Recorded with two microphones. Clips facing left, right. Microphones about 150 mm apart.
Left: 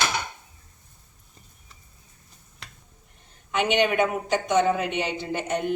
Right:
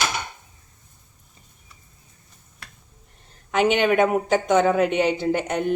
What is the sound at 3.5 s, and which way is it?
A woman's voice, 45° right (ahead or behind).